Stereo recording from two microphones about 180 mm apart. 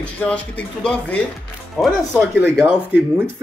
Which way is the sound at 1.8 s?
Centre (ahead or behind).